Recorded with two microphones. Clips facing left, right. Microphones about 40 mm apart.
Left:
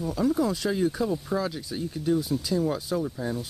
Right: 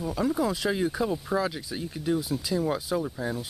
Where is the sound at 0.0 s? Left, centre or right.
Centre.